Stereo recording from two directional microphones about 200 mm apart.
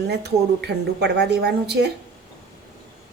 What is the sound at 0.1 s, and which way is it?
A woman's voice, 55° right (ahead or behind).